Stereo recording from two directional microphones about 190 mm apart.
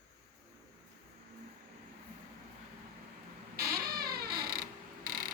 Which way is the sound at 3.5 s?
55° right (ahead or behind).